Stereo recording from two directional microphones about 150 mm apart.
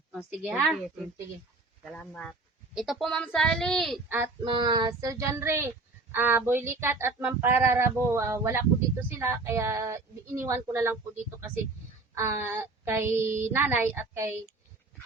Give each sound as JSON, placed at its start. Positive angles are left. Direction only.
{"t": 0.1, "sound": "speech", "side_deg": -5}
{"t": 1.8, "sound": "speech", "side_deg": 5}
{"t": 4.4, "sound": "speech", "side_deg": -30}
{"t": 12.1, "sound": "speech", "side_deg": -20}